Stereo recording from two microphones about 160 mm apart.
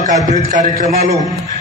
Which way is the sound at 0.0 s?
50° right (ahead or behind).